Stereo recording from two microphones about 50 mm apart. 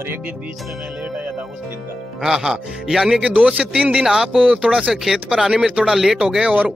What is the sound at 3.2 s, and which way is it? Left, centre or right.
A man's voice, right.